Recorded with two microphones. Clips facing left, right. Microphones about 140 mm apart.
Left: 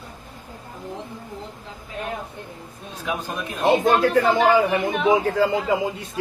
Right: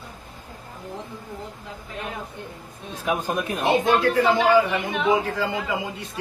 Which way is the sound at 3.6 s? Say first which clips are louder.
Left 3 dB; 50° left (ahead or behind).